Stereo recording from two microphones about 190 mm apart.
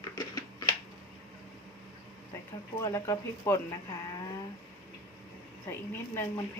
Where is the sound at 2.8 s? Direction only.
15° left (ahead or behind).